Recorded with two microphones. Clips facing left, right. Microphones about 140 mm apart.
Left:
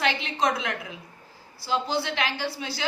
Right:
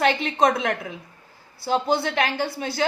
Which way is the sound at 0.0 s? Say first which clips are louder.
Right 6 dB; 50° right (ahead or behind).